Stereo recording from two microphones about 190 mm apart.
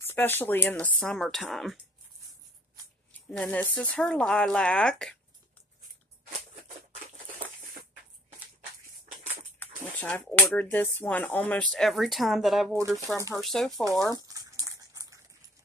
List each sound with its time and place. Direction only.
0.0 s speech: 10° left (ahead or behind)
3.1 s speech: 5° left (ahead or behind)
9.6 s speech: 10° left (ahead or behind)
12.7 s speech: 15° right (ahead or behind)
13.4 s speech: centre (ahead or behind)
14.1 s a sound: 20° right (ahead or behind)